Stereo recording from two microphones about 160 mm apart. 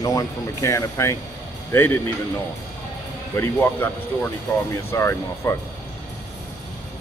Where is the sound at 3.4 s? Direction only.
15° left (ahead or behind).